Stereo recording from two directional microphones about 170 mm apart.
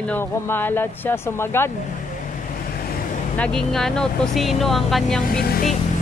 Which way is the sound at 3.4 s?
5° left (ahead or behind).